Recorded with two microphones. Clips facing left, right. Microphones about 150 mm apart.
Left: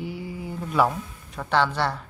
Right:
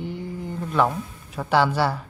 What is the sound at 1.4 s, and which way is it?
Speech, 10° right (ahead or behind).